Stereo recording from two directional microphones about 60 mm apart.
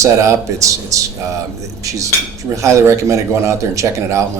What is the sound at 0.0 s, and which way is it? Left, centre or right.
Speech, right.